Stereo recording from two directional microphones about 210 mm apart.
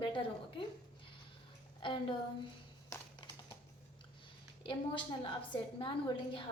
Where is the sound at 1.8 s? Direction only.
25° left (ahead or behind).